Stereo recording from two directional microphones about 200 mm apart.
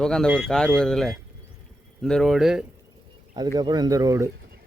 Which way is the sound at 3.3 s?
20° right (ahead or behind).